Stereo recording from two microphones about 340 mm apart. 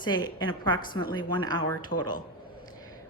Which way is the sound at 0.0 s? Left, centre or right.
Centre.